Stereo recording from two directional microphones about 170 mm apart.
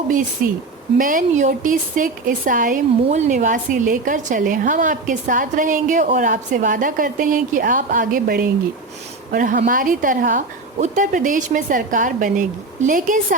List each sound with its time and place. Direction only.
0.4 s speech: 55° right (ahead or behind)